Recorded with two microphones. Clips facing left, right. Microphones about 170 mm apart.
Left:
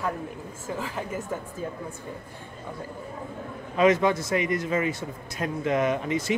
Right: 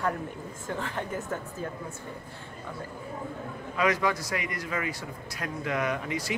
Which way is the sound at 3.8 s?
25° left (ahead or behind).